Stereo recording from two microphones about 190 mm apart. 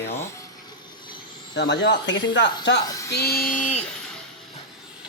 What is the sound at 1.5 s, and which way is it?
Speech, 65° left (ahead or behind).